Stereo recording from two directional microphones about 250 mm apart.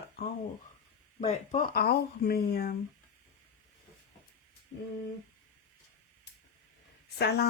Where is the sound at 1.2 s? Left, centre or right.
Left.